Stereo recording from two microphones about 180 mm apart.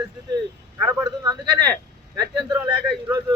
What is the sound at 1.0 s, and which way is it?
A man's voice, 20° right (ahead or behind).